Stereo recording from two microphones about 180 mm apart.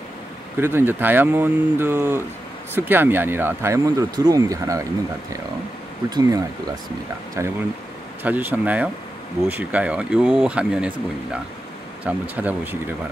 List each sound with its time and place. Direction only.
0.6 s speech: 10° right (ahead or behind)
6.0 s speech: 20° right (ahead or behind); by 10.9 s 5° right (ahead or behind)
12.0 s speech: 10° right (ahead or behind)